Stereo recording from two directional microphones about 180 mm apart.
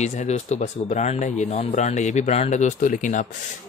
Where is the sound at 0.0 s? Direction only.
40° left (ahead or behind).